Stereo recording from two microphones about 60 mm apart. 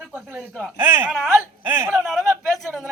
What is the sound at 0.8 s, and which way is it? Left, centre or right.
Speech, right.